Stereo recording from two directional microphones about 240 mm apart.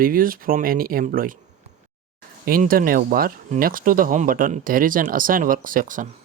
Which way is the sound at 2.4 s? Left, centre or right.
Right.